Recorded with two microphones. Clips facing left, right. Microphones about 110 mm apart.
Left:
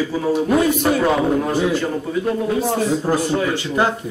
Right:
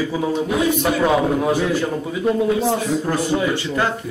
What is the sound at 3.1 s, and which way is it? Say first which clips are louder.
Speech: left 1 dB; 25° left (ahead or behind).